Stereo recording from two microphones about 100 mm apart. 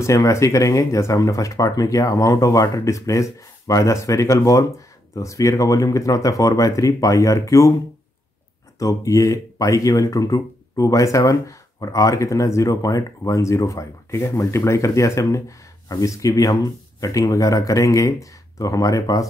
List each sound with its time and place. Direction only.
0.0 s speech: 30° left (ahead or behind)
8.7 s speech: 35° left (ahead or behind)